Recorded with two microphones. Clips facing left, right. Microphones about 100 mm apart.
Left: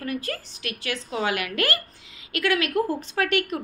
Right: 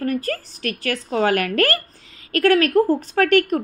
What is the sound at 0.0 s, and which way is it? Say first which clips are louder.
A woman's voice: right 7 dB; 45° right (ahead or behind).